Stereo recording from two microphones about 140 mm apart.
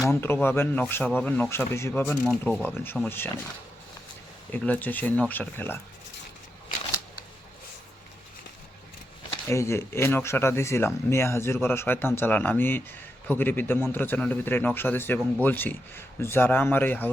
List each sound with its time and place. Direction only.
0.1 s speech: 15° left (ahead or behind)
4.5 s speech: 10° left (ahead or behind)
9.5 s speech: 20° left (ahead or behind)